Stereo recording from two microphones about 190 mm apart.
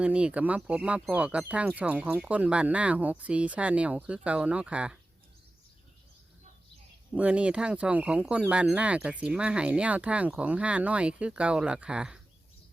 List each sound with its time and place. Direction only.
0.0 s speech: 5° right (ahead or behind)
7.1 s speech: 5° right (ahead or behind)